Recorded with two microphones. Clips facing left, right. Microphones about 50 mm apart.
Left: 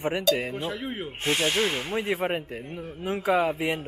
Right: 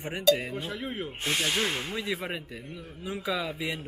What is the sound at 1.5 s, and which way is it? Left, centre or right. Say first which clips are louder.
Speech: left 3 dB; centre.